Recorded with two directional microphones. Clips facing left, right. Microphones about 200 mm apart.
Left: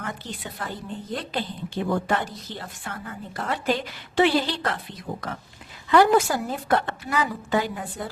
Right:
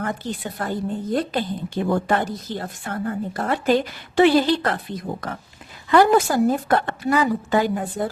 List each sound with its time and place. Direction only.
0.0 s a woman's voice: 50° right (ahead or behind)